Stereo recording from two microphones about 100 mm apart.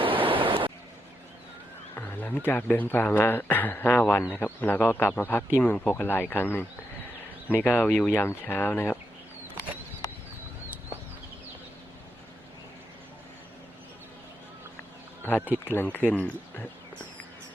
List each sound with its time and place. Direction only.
0.0 s a sound: 60° right (ahead or behind)
2.0 s speech: 15° left (ahead or behind)
15.2 s speech: 15° left (ahead or behind)